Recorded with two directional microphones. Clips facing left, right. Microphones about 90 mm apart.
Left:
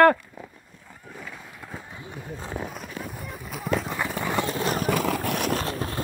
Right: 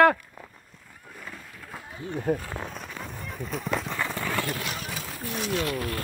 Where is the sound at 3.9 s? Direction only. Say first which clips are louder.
Left 3 dB; 15° left (ahead or behind).